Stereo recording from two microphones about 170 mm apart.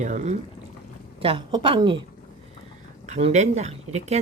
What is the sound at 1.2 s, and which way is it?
Speech, 30° right (ahead or behind).